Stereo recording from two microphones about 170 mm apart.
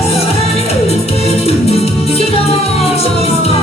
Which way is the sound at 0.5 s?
35° left (ahead or behind).